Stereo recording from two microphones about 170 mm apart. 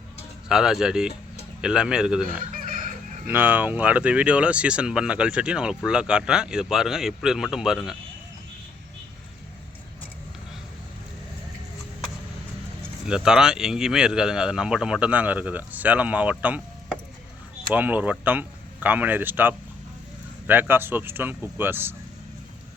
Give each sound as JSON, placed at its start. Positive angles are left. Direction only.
{"t": 0.4, "sound": "speech", "side_deg": -5}
{"t": 2.5, "sound": "fowl", "side_deg": -50}
{"t": 3.2, "sound": "speech", "side_deg": -10}
{"t": 13.1, "sound": "speech", "side_deg": -5}